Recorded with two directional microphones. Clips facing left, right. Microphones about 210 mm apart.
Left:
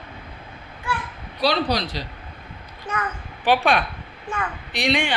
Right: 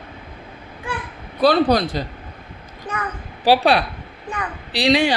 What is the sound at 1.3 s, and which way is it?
Speech, 50° right (ahead or behind).